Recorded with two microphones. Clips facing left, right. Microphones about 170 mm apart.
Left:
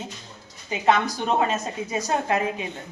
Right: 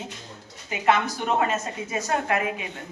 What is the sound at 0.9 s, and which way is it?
Speech, 35° left (ahead or behind).